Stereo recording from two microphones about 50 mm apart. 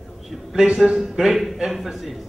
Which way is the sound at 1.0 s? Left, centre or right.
Centre.